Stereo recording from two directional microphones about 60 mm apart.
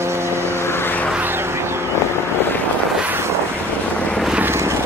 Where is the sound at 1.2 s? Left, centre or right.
Right.